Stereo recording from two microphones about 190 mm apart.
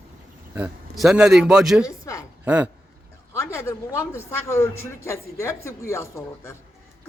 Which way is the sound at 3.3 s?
15° left (ahead or behind).